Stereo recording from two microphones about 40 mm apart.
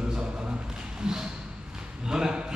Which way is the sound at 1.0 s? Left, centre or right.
Centre.